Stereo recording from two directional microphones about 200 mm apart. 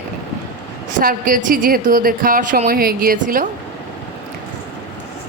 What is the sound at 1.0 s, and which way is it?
A woman's voice, 40° right (ahead or behind).